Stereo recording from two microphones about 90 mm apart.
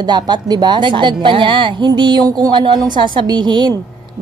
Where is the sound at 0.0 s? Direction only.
55° right (ahead or behind).